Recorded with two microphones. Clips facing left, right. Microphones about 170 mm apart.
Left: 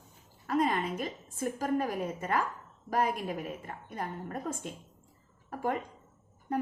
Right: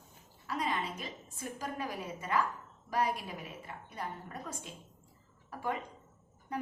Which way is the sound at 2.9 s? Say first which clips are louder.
Left 3 dB; 50° left (ahead or behind).